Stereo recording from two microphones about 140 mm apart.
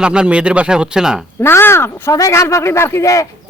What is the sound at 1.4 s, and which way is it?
A woman's voice, 15° left (ahead or behind).